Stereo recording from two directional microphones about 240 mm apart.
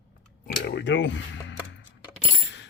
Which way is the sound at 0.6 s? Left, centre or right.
Left.